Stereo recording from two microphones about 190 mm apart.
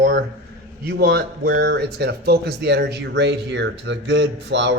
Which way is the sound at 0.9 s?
55° right (ahead or behind).